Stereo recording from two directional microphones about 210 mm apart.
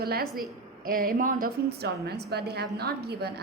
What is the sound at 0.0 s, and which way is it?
A woman's voice, 45° right (ahead or behind).